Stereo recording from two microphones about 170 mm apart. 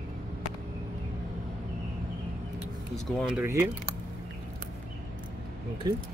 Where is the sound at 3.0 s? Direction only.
Centre (ahead or behind).